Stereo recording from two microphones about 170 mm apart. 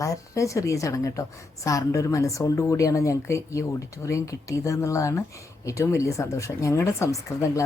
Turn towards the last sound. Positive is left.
turn(degrees=20)  # may be behind; listen again after turning